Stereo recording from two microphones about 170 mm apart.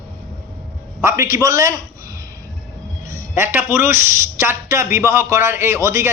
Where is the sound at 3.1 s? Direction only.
15° right (ahead or behind).